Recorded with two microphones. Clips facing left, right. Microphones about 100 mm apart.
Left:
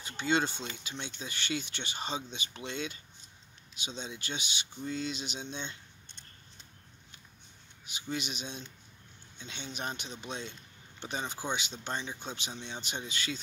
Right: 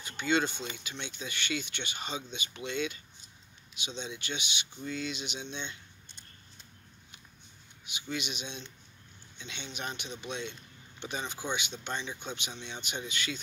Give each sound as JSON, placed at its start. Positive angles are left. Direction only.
{"t": 0.0, "sound": "speech", "side_deg": 35}
{"t": 7.8, "sound": "speech", "side_deg": 40}